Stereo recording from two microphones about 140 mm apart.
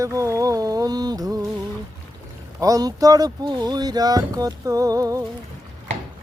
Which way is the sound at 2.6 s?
25° right (ahead or behind).